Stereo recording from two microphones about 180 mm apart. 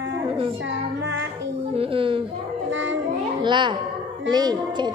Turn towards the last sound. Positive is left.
turn(degrees=-25)  # may be behind; listen again after turning